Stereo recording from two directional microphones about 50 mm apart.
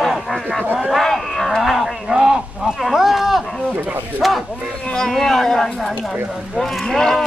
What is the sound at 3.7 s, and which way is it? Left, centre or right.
Speech, right.